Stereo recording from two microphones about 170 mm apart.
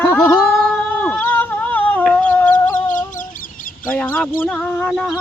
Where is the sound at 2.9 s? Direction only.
50° left (ahead or behind).